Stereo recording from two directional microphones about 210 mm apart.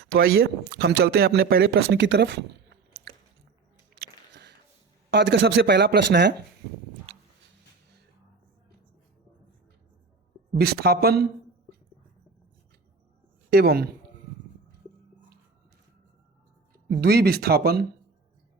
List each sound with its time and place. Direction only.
0.1 s speech: 45° right (ahead or behind)
3.9 s a sound: 45° right (ahead or behind)
5.1 s speech: 55° right (ahead or behind)
10.6 s speech: 50° right (ahead or behind)
13.5 s speech: 50° right (ahead or behind)
17.0 s speech: 45° right (ahead or behind)